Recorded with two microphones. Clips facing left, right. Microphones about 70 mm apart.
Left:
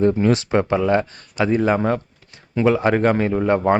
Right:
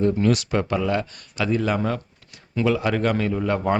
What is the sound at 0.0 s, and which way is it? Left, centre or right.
Speech, left.